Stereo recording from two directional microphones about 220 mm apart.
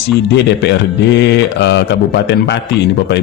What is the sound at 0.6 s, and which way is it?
Speech, 50° left (ahead or behind).